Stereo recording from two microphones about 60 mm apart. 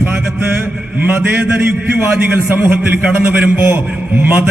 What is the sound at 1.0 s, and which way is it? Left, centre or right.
A man's voice, right.